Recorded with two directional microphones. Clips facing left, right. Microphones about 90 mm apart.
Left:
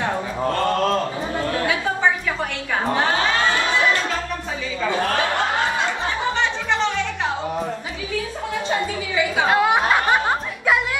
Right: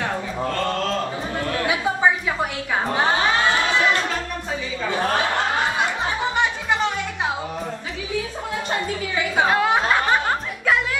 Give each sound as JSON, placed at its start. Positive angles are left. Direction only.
{"t": 0.0, "sound": "mantra", "side_deg": 25}
{"t": 1.4, "sound": "chatter", "side_deg": 30}
{"t": 3.0, "sound": "crowd", "side_deg": -20}
{"t": 4.9, "sound": "a sound", "side_deg": -20}
{"t": 6.3, "sound": "music", "side_deg": -15}
{"t": 9.5, "sound": "snicker", "side_deg": 15}